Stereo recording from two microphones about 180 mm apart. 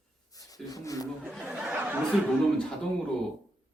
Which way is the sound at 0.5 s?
20° left (ahead or behind).